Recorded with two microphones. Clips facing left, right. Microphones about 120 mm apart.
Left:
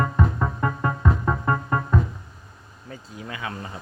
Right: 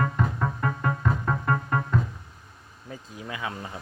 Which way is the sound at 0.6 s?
20° left (ahead or behind).